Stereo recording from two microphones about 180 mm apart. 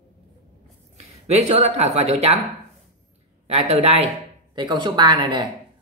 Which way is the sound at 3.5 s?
35° right (ahead or behind).